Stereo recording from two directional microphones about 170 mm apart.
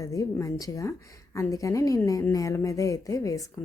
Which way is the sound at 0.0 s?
20° left (ahead or behind).